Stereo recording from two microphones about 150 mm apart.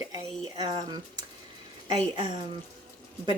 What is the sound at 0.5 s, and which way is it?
Speech, 25° right (ahead or behind).